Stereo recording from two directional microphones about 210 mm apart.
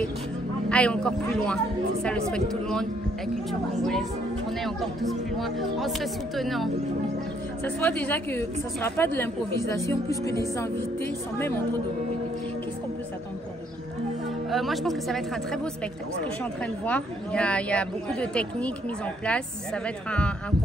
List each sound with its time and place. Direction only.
0.7 s speech: 5° left (ahead or behind)
4.6 s speech: centre (ahead or behind)
8.0 s a woman's voice: 10° left (ahead or behind)
14.5 s speech: centre (ahead or behind)
16.8 s speech: 5° left (ahead or behind)